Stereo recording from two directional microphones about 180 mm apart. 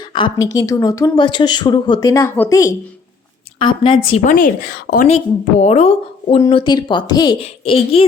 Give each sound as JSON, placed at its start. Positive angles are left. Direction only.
{"t": 0.0, "sound": "a woman's voice", "side_deg": 25}
{"t": 3.6, "sound": "a woman's voice", "side_deg": 30}
{"t": 4.3, "sound": "speech", "side_deg": 50}
{"t": 5.1, "sound": "a woman's voice", "side_deg": 35}
{"t": 6.5, "sound": "a woman's voice", "side_deg": 25}